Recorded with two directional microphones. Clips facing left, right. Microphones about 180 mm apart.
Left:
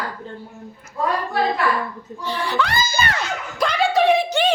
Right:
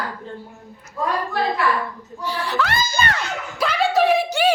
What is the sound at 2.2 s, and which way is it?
Speech, 5° right (ahead or behind).